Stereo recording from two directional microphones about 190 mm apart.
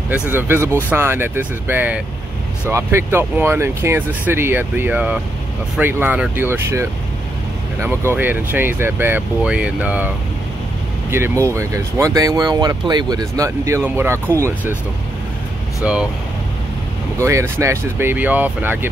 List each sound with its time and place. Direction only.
0.3 s speech: 10° right (ahead or behind)
15.8 s speech: 5° right (ahead or behind)
17.2 s speech: 15° right (ahead or behind)